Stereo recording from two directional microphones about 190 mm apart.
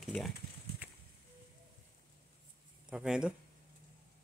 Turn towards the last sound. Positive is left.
turn(degrees=-5)  # may be behind; listen again after turning